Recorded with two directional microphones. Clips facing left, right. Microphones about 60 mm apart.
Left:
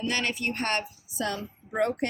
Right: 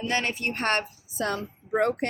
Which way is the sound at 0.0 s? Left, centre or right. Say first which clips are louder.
Right 1 dB; right.